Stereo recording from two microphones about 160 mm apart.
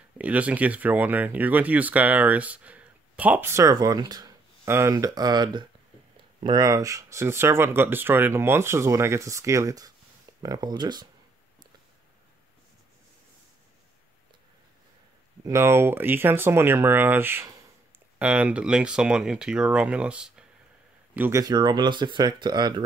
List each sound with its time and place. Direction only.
0.2 s speech: 10° right (ahead or behind); by 11.1 s 25° right (ahead or behind)
15.4 s speech: 15° right (ahead or behind)